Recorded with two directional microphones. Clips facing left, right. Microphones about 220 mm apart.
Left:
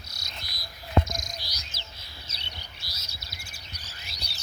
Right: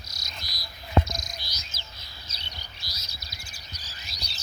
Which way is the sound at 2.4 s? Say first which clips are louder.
Even; 30° left (ahead or behind).